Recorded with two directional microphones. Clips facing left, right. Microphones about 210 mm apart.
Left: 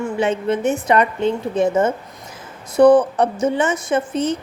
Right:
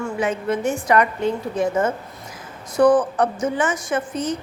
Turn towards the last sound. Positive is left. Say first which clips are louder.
# left 4 dB
turn(degrees=25)  # may be behind; listen again after turning